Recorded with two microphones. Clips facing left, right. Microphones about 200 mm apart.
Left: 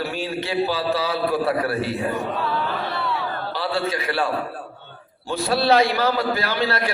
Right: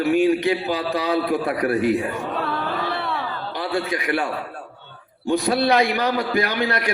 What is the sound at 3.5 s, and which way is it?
Speech, 15° right (ahead or behind).